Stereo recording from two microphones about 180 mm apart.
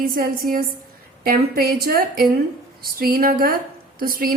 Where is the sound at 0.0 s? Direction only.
50° right (ahead or behind).